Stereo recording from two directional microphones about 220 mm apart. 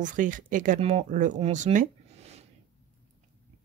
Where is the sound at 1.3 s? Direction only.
30° right (ahead or behind).